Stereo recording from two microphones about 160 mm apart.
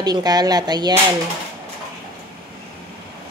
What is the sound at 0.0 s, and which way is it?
Speech, 25° right (ahead or behind).